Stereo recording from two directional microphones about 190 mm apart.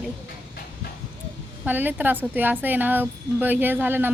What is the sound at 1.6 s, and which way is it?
A woman's voice, 10° right (ahead or behind).